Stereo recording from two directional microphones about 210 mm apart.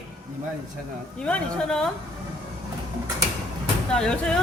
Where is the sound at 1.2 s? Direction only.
5° left (ahead or behind).